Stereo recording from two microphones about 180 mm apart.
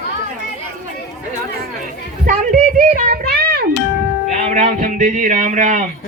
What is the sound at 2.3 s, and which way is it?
A child's voice, 45° right (ahead or behind).